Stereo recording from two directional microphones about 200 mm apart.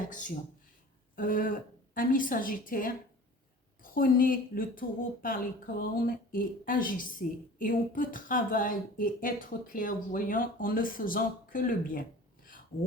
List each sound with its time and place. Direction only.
0.1 s speech: 40° left (ahead or behind)